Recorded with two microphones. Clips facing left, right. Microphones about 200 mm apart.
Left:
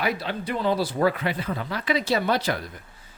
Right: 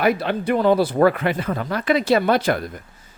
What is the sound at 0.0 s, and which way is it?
Speech, 55° right (ahead or behind).